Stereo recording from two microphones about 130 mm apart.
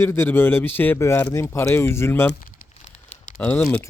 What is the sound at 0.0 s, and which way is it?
Speech, 20° left (ahead or behind).